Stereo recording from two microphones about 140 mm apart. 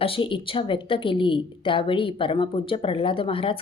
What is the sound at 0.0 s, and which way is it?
A woman's voice, 40° left (ahead or behind).